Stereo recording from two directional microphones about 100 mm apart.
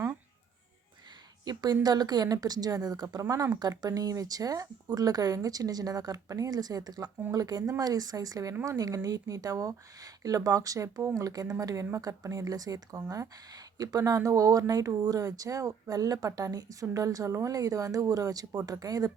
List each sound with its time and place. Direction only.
1.5 s speech: 40° right (ahead or behind)